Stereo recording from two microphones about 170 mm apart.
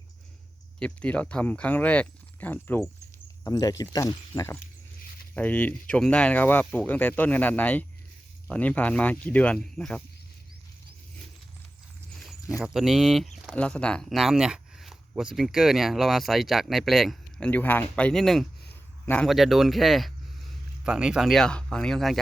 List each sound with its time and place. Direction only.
0.8 s speech: 5° left (ahead or behind)
3.4 s speech: 20° left (ahead or behind); by 10.0 s 5° left (ahead or behind)
12.1 s a sound: centre (ahead or behind)
12.5 s speech: 5° right (ahead or behind)
19.3 s speech: centre (ahead or behind)